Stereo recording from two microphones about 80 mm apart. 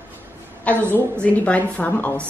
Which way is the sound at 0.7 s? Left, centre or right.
Centre.